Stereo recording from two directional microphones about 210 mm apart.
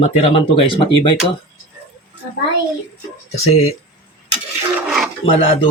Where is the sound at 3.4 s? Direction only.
30° left (ahead or behind).